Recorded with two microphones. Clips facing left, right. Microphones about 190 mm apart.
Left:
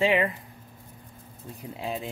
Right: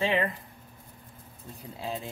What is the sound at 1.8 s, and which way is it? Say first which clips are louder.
Speech: left 2 dB; 15° left (ahead or behind).